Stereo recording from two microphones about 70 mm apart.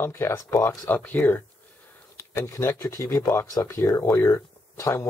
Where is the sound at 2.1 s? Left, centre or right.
Left.